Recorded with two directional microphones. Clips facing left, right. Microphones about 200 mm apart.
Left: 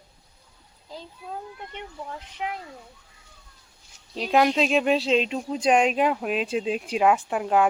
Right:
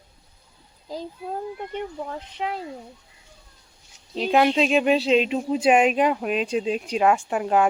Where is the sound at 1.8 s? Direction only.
35° right (ahead or behind).